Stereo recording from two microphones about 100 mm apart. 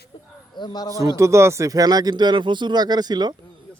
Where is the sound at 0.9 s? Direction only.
35° right (ahead or behind).